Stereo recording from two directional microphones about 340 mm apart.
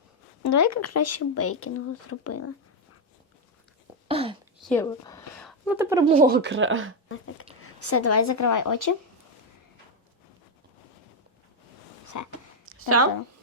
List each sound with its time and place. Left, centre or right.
0.4 s speech: left
4.1 s a sound: centre
4.6 s speech: centre
6.3 s speech: right
7.8 s speech: left
12.0 s a sound: left
12.9 s speech: right